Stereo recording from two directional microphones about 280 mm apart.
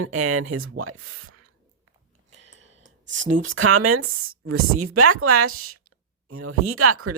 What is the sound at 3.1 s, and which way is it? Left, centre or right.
Speech, right.